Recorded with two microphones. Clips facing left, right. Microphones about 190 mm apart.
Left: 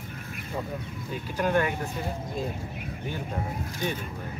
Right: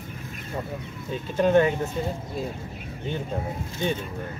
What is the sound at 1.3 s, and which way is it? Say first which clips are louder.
Speech: right 6 dB; 25° right (ahead or behind).